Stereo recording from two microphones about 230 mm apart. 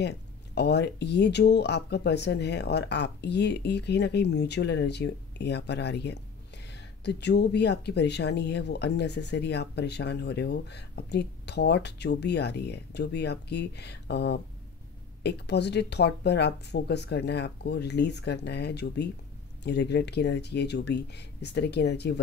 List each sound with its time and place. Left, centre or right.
0.0 s speech: left